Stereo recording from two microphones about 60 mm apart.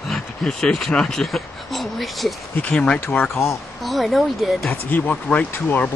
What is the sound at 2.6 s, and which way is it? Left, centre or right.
Speech, centre.